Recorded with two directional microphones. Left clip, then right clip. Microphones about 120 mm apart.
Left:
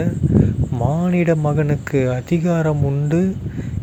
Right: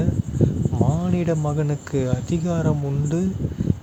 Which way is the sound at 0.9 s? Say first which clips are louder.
Left 10 dB; 30° left (ahead or behind).